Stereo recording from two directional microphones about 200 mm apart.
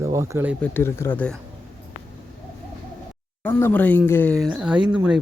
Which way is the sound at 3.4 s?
10° left (ahead or behind).